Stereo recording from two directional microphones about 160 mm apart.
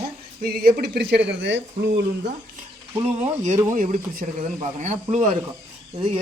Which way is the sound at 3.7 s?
55° right (ahead or behind).